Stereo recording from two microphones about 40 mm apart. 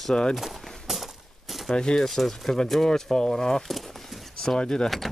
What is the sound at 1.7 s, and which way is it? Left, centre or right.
Speech, centre.